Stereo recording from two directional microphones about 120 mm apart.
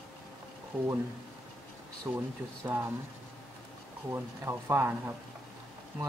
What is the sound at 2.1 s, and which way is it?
Speech, 10° right (ahead or behind).